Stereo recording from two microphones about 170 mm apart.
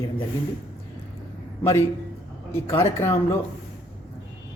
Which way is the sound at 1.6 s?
15° left (ahead or behind).